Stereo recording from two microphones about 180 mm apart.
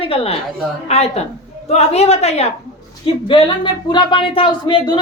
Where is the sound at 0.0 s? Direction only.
30° left (ahead or behind).